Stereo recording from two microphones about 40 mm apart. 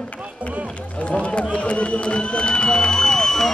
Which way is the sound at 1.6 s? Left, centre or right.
Left.